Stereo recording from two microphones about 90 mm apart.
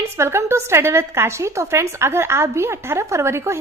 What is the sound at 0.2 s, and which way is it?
A woman's voice, 30° right (ahead or behind).